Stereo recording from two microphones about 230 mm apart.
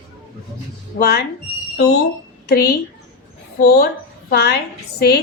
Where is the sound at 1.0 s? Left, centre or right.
Left.